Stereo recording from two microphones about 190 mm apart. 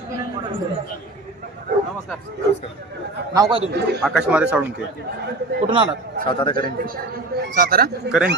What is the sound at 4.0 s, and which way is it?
Speech, centre (ahead or behind).